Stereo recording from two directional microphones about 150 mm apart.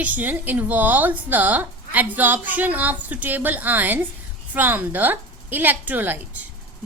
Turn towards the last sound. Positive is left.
turn(degrees=-10)  # may be behind; listen again after turning